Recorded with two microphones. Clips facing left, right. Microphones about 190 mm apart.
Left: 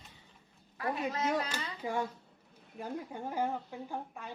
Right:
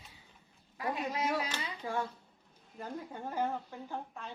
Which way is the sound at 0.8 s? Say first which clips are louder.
Left 1 dB; 15° right (ahead or behind).